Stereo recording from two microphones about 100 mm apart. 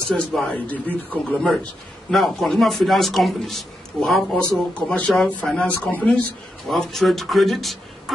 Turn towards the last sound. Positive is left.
turn(degrees=0)  # may be behind; listen again after turning